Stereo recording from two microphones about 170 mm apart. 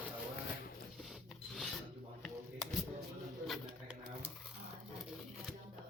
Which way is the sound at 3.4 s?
Centre (ahead or behind).